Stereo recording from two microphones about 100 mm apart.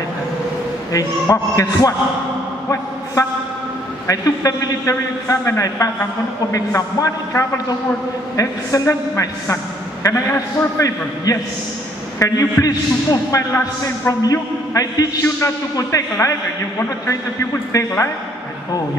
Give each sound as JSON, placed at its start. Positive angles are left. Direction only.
{"t": 0.9, "sound": "a man's voice", "side_deg": 35}
{"t": 3.2, "sound": "a man's voice", "side_deg": 30}
{"t": 17.7, "sound": "a man's voice", "side_deg": 30}